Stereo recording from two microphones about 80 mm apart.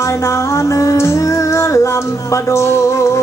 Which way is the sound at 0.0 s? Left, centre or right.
Left.